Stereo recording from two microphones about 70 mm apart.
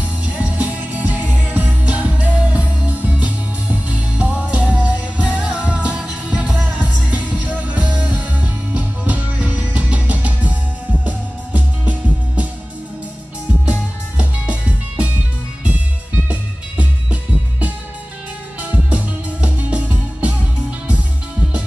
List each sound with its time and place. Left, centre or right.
0.2 s music: right
6.4 s music: centre
6.8 s music: right
13.7 s music: centre
16.3 s music: centre